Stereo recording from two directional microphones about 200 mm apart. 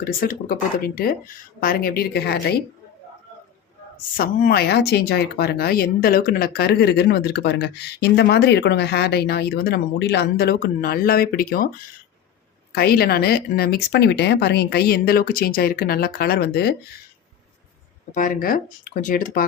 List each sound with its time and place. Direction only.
0.0 s speech: 45° left (ahead or behind)
3.9 s speech: 45° left (ahead or behind)
12.7 s speech: 50° left (ahead or behind)
18.1 s speech: 40° left (ahead or behind)